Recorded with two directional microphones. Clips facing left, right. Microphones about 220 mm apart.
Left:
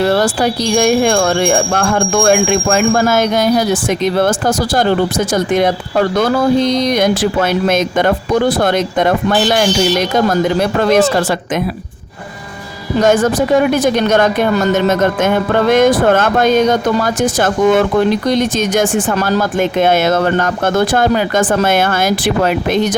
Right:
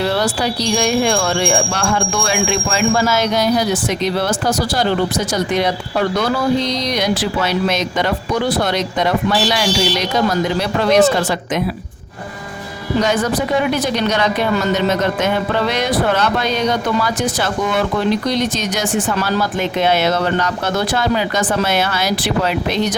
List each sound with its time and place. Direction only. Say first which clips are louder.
0.0 s speech: left 5 dB; 50° left (ahead or behind)
13.0 s speech: left 6 dB; 50° left (ahead or behind)